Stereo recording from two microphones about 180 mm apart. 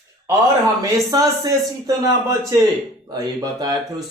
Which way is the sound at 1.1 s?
20° right (ahead or behind).